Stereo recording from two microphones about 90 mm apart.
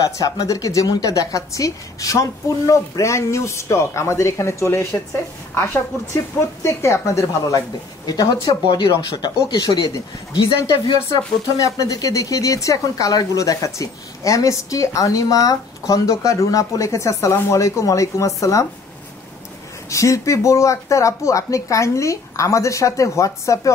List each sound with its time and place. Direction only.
0.0 s a woman's voice: 40° left (ahead or behind)
10.5 s speech: 65° left (ahead or behind)
11.1 s a woman's voice: 40° left (ahead or behind)
19.9 s a woman's voice: 35° left (ahead or behind)